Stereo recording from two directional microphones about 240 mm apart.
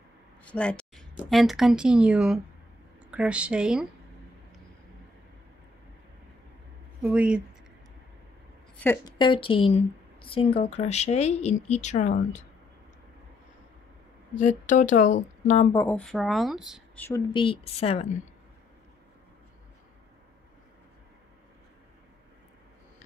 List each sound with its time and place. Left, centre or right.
0.5 s a sound: centre
1.1 s speech: centre
7.0 s speech: centre
8.7 s a woman's voice: centre; by 12.4 s left
14.7 s speech: left
15.7 s speech: centre
17.3 s speech: left